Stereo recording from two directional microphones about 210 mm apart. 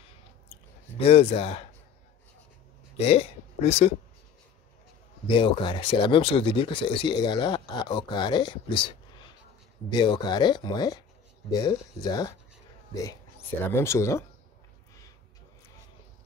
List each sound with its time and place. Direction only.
0.9 s speech: 30° left (ahead or behind)
3.0 s speech: 30° left (ahead or behind)
5.3 s speech: 25° left (ahead or behind)
13.7 s speech: 10° left (ahead or behind)